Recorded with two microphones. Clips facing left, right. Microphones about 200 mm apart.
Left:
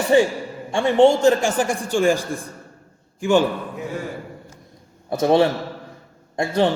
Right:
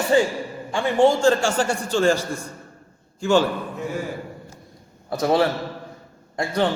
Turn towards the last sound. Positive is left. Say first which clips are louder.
# left 3 dB
turn(degrees=25)  # may be behind; listen again after turning